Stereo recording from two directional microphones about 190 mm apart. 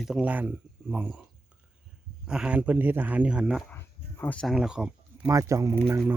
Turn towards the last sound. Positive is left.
turn(degrees=-10)  # may be behind; listen again after turning